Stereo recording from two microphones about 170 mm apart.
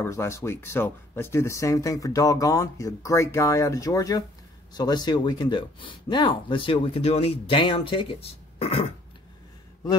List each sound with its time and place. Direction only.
0.0 s speech: 15° left (ahead or behind); by 8.9 s 35° left (ahead or behind)